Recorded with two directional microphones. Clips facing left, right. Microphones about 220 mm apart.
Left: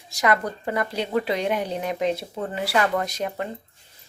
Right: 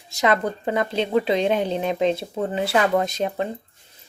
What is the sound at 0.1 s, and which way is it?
Speech, 25° right (ahead or behind).